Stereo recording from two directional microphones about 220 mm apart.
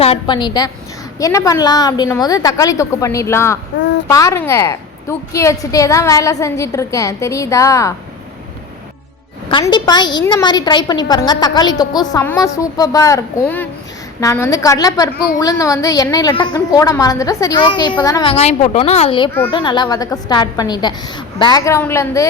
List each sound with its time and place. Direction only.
0.0 s a woman's voice: 25° left (ahead or behind)
9.5 s a woman's voice: 20° left (ahead or behind)